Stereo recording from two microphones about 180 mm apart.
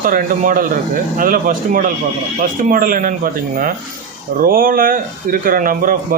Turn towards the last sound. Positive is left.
turn(degrees=-50)  # may be behind; listen again after turning